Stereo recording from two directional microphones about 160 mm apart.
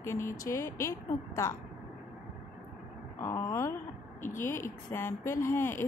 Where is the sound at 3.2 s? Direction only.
25° left (ahead or behind).